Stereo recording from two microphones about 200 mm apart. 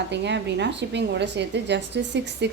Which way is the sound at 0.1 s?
60° right (ahead or behind).